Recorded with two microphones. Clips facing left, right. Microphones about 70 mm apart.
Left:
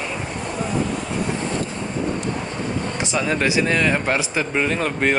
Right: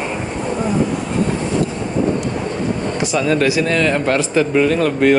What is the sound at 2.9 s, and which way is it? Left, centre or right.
Speech, left.